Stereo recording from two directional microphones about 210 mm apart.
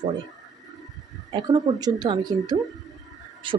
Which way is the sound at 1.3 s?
20° right (ahead or behind).